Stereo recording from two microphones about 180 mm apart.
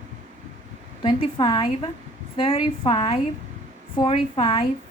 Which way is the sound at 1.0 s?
30° left (ahead or behind).